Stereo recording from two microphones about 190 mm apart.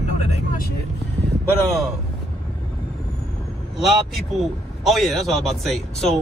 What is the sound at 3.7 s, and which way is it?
Speech, centre (ahead or behind).